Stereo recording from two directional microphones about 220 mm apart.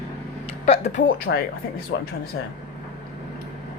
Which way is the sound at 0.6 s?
30° left (ahead or behind).